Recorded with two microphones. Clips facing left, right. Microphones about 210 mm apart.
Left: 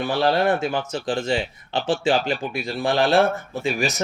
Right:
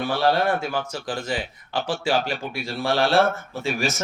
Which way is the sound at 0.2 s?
20° left (ahead or behind).